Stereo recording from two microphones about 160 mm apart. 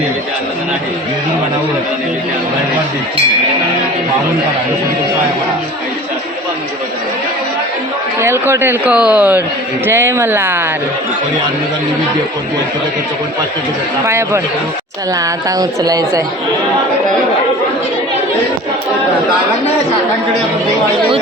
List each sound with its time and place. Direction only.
8.2 s a man's voice: 15° right (ahead or behind)
14.0 s a man's voice: 15° right (ahead or behind)